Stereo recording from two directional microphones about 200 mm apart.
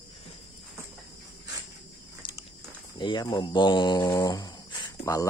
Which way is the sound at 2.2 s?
25° left (ahead or behind).